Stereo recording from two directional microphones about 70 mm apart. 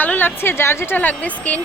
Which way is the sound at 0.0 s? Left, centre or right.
Left.